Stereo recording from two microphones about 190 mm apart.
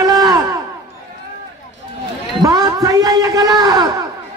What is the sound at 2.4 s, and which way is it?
Speech, 20° right (ahead or behind).